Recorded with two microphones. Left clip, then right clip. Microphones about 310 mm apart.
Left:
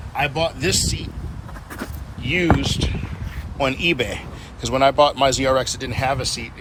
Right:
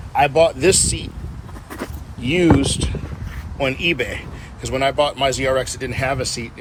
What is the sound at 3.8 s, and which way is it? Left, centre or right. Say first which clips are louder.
Speech: right 1 dB; left.